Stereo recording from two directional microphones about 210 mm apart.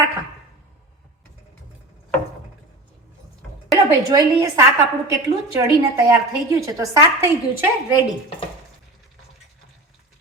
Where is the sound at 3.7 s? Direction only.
15° right (ahead or behind).